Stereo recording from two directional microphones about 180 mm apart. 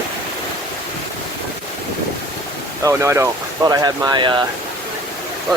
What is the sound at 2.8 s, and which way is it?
Speech, 15° right (ahead or behind).